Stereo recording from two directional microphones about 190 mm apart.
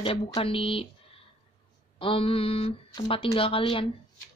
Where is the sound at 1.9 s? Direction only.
30° left (ahead or behind).